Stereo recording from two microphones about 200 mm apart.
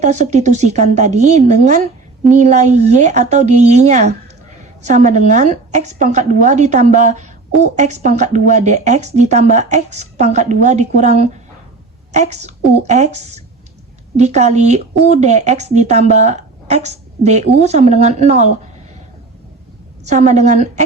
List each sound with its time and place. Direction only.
0.0 s a woman's voice: 35° right (ahead or behind)
20.1 s a woman's voice: 35° right (ahead or behind)